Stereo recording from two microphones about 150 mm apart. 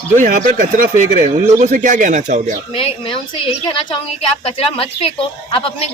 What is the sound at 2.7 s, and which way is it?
Speech, 40° left (ahead or behind).